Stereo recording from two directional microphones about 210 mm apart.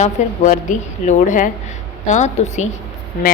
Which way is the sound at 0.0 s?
35° left (ahead or behind).